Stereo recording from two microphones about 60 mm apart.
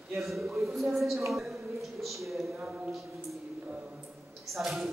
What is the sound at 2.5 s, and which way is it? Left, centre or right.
Speech, right.